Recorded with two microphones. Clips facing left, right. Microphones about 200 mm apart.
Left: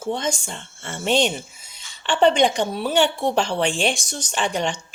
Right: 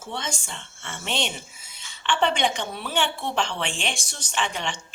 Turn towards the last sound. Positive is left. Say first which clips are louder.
# left 5 dB
turn(degrees=40)  # may be behind; listen again after turning